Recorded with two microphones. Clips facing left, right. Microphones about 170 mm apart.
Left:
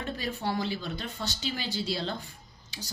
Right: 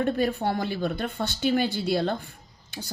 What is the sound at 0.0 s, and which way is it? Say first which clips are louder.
Speech: right 9 dB; 55° right (ahead or behind).